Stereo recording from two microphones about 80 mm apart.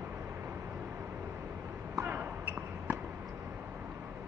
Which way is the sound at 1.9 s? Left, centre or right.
Right.